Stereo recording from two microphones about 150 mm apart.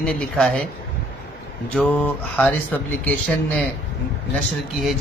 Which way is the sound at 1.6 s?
10° left (ahead or behind).